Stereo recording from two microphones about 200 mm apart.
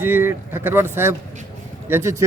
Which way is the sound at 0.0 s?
10° right (ahead or behind).